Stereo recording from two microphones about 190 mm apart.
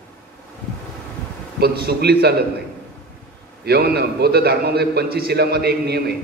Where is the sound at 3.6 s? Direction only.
55° right (ahead or behind).